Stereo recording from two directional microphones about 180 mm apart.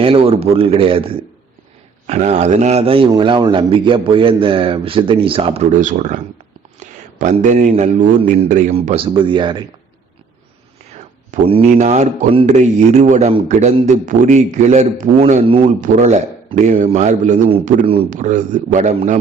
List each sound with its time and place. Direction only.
0.0 s a man's voice: 30° right (ahead or behind)
5.7 s a man's voice: 45° right (ahead or behind); by 9.6 s 25° right (ahead or behind)
11.4 s a man's voice: 35° right (ahead or behind)